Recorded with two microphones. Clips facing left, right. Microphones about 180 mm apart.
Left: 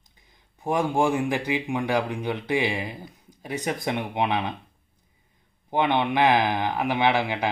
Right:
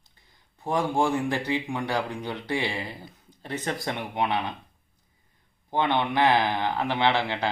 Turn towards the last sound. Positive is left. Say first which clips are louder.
# left 2 dB
turn(degrees=15)  # may be behind; listen again after turning